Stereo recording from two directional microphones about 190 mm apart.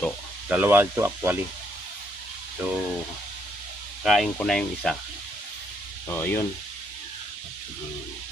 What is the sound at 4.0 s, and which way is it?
Speech, centre (ahead or behind).